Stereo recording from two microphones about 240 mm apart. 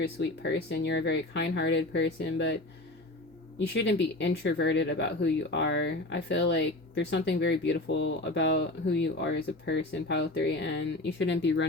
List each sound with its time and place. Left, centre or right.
0.0 s speech: left
3.8 s speech: left